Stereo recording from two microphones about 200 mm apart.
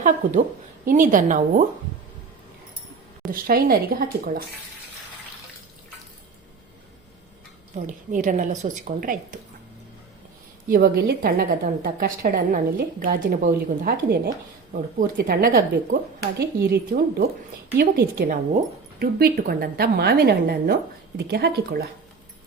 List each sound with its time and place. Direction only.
0.0 s a woman's voice: 40° right (ahead or behind)
3.3 s a woman's voice: 50° right (ahead or behind)
7.8 s a woman's voice: 40° right (ahead or behind)
10.7 s a woman's voice: 50° right (ahead or behind)